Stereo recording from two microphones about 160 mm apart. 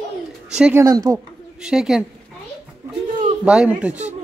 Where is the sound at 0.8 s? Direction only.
20° right (ahead or behind).